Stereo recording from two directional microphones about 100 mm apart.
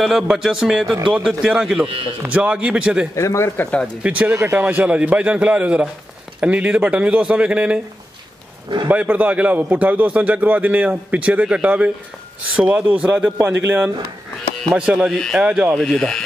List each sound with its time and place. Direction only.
0.0 s a man's voice: 5° right (ahead or behind)
3.2 s speech: 30° left (ahead or behind)
4.0 s a man's voice: 15° right (ahead or behind)
8.8 s a man's voice: 15° right (ahead or behind)
14.8 s a man's voice: 5° right (ahead or behind)
15.7 s a man's voice: 5° left (ahead or behind)